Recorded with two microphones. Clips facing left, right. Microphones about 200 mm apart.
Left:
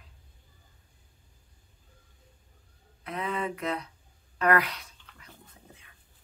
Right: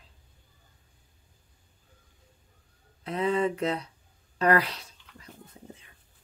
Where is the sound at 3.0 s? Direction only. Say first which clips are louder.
Right 6 dB; 30° right (ahead or behind).